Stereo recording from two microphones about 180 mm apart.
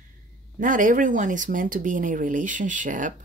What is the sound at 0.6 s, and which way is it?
Speech, 45° right (ahead or behind).